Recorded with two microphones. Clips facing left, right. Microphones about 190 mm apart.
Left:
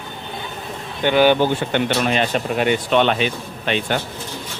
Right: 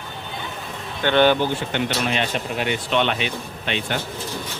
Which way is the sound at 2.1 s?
45° left (ahead or behind).